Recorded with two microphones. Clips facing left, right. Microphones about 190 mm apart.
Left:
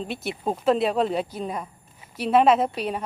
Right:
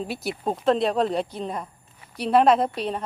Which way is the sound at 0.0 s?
Centre (ahead or behind).